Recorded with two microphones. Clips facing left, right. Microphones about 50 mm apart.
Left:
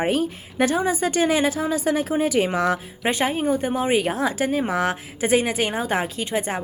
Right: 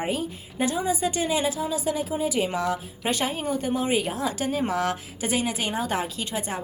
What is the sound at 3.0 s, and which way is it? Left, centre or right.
A woman's voice, left.